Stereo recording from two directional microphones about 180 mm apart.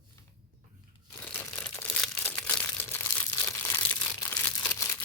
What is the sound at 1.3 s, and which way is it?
Crumpling, 5° left (ahead or behind).